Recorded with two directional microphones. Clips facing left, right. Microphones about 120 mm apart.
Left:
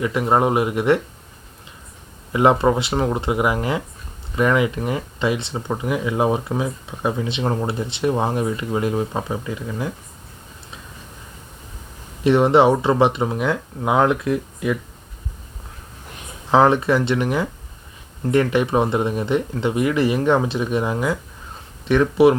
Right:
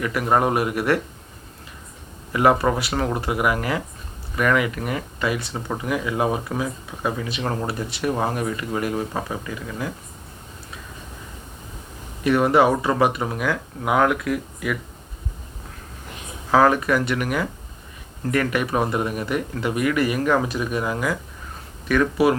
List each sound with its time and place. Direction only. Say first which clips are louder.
0.0 s speech: left 2 dB; 25° left (ahead or behind)
2.3 s speech: left 2 dB; 25° left (ahead or behind)
12.2 s speech: left 3 dB; 25° left (ahead or behind)
16.5 s speech: left 2 dB; 25° left (ahead or behind)